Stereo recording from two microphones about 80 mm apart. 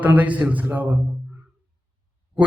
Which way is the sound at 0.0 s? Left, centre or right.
Right.